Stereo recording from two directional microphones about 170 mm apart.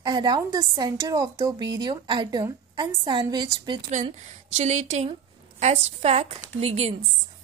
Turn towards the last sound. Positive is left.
turn(degrees=-35)  # may be behind; listen again after turning